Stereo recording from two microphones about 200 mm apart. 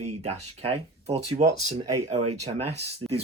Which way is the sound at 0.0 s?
30° right (ahead or behind).